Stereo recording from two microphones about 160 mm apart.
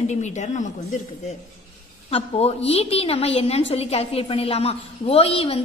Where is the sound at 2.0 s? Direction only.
40° left (ahead or behind).